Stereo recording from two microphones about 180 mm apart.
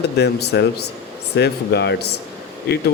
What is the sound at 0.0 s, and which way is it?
Speech, 65° left (ahead or behind).